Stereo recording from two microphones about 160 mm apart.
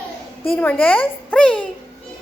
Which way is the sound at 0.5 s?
10° left (ahead or behind).